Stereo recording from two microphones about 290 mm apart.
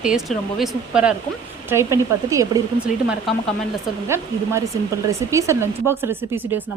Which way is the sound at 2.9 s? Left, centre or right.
Left.